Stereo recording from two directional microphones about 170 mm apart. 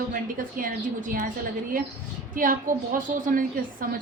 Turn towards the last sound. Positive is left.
turn(degrees=-55)  # may be behind; listen again after turning